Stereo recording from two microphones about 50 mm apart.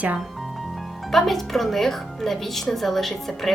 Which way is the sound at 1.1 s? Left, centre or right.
Centre.